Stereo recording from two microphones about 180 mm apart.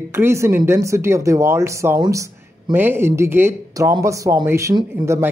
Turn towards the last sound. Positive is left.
turn(degrees=-15)  # may be behind; listen again after turning